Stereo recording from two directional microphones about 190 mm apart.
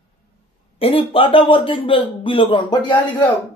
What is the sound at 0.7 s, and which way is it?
A man's voice, 30° left (ahead or behind).